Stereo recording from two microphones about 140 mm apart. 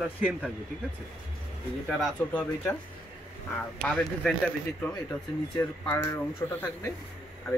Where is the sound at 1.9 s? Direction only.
5° left (ahead or behind).